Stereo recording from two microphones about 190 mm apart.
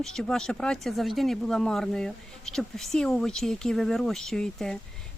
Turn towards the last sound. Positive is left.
turn(degrees=5)  # may be behind; listen again after turning